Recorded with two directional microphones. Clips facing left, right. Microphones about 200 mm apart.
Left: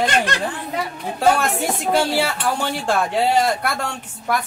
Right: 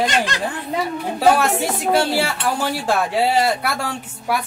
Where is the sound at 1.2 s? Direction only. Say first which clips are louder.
Right 2 dB; 5° right (ahead or behind).